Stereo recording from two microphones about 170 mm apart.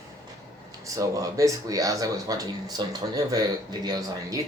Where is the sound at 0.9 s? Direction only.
20° right (ahead or behind).